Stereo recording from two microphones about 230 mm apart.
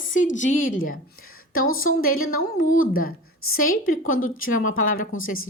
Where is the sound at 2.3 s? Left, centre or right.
Left.